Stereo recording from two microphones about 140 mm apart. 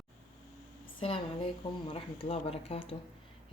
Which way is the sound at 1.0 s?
40° left (ahead or behind).